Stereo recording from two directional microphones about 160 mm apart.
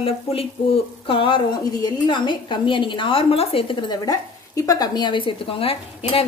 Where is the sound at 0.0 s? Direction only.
35° left (ahead or behind).